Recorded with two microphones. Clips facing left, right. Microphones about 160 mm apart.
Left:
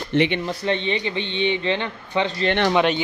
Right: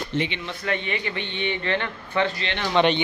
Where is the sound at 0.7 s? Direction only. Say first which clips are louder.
Left 3 dB; 25° left (ahead or behind).